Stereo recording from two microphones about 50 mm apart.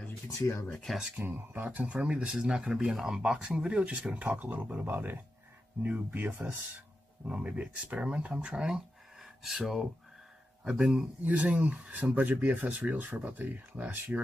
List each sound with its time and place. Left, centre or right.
0.9 s speech: centre
1.2 s speech: right
2.0 s speech: centre
4.8 s speech: right
7.2 s speech: right
11.2 s speech: right
13.0 s speech: right